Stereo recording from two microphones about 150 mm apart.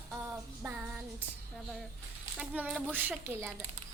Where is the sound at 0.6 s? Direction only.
10° right (ahead or behind).